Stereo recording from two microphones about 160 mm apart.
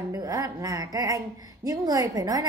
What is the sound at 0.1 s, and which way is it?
Speech, 20° right (ahead or behind).